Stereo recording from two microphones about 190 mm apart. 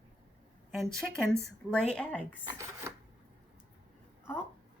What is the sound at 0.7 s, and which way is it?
A woman's voice, 5° left (ahead or behind).